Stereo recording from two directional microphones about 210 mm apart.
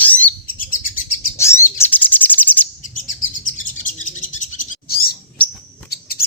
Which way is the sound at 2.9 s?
40° left (ahead or behind).